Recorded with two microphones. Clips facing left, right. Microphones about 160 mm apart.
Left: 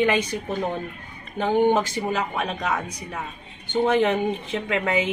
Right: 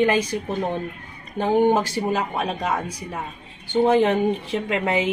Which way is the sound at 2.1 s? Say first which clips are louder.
Right 2 dB; 35° right (ahead or behind).